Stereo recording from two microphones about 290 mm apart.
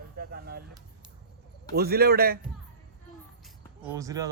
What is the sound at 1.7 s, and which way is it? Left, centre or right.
Speech, right.